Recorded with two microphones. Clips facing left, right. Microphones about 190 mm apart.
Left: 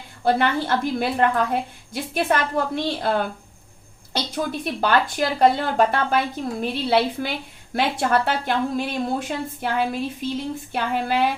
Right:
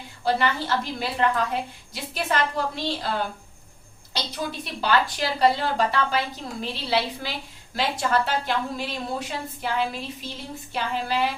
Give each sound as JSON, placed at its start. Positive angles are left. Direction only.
{"t": 0.3, "sound": "a woman's voice", "side_deg": 55}
{"t": 4.6, "sound": "a woman's voice", "side_deg": 50}